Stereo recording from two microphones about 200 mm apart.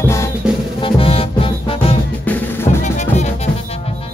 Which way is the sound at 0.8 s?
30° left (ahead or behind).